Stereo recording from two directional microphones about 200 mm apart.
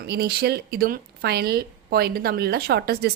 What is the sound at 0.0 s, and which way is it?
Speech, 50° right (ahead or behind).